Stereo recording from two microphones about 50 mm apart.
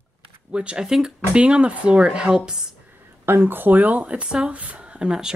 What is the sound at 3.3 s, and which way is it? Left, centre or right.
Speech, right.